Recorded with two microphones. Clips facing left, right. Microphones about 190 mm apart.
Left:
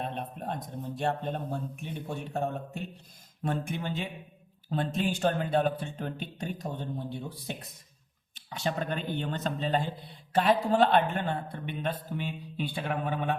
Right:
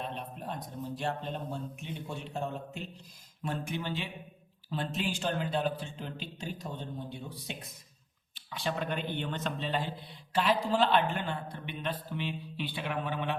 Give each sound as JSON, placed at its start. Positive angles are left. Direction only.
{"t": 0.0, "sound": "speech", "side_deg": 50}
{"t": 8.6, "sound": "speech", "side_deg": 45}
{"t": 10.3, "sound": "speech", "side_deg": 55}